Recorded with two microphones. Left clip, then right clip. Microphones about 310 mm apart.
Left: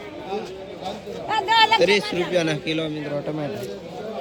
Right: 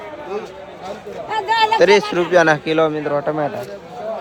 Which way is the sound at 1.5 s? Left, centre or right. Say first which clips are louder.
Right 4 dB; centre.